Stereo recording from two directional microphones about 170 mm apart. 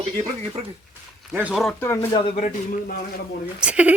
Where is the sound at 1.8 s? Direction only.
15° left (ahead or behind).